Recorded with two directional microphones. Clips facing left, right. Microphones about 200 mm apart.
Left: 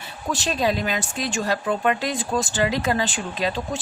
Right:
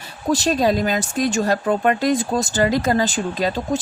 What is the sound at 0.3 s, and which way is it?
Speech, 40° right (ahead or behind).